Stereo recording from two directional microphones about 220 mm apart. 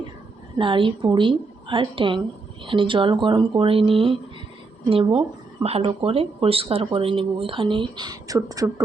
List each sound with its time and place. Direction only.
0.6 s speech: 20° right (ahead or behind)